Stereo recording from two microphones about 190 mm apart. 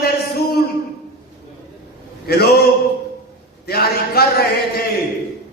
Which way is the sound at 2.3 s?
55° left (ahead or behind).